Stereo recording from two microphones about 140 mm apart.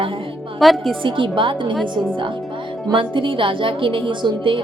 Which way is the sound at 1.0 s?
35° right (ahead or behind).